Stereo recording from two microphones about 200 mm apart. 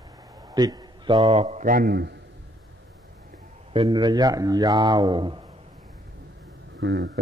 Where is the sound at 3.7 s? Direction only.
20° right (ahead or behind).